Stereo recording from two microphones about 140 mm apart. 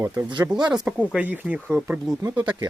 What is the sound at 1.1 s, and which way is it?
Speech, 10° right (ahead or behind).